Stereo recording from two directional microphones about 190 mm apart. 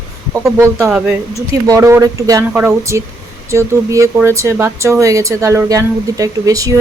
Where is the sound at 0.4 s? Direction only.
5° right (ahead or behind).